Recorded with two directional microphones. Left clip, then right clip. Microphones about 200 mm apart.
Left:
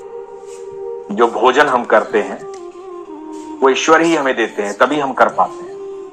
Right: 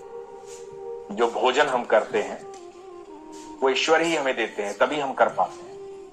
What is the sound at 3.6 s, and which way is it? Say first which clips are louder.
A man's voice: left 9 dB; 40° left (ahead or behind).